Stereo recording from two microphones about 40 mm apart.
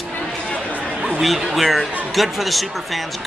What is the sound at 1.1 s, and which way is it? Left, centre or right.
A man's voice, centre.